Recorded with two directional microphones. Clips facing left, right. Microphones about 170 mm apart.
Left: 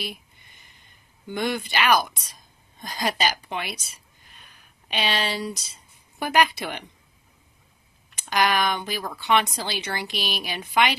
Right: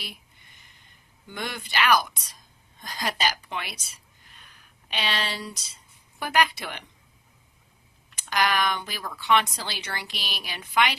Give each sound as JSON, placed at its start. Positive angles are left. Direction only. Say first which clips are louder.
{"t": 1.3, "sound": "a woman's voice", "louder": "left 7 dB", "side_deg": 20}
{"t": 4.9, "sound": "a woman's voice", "louder": "left 4 dB", "side_deg": 15}
{"t": 8.3, "sound": "a woman's voice", "louder": "left 2 dB", "side_deg": 15}